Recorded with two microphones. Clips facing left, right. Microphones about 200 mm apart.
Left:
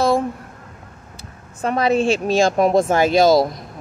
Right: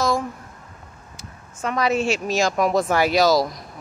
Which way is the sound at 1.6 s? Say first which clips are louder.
Left 4 dB; 30° left (ahead or behind).